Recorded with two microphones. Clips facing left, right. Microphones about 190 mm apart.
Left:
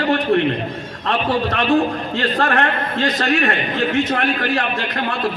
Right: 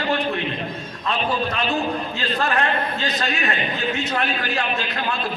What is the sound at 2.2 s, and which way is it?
A man's voice, 60° left (ahead or behind).